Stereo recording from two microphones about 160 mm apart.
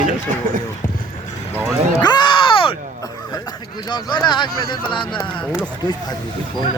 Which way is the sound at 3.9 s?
30° left (ahead or behind).